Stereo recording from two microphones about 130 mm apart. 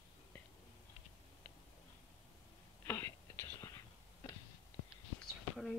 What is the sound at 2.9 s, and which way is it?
Whispering, 20° left (ahead or behind).